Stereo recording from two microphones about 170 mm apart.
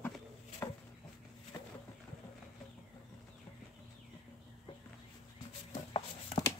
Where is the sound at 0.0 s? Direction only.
10° left (ahead or behind).